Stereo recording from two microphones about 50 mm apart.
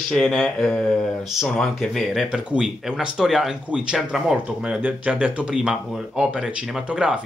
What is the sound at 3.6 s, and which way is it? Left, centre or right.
Speech, centre.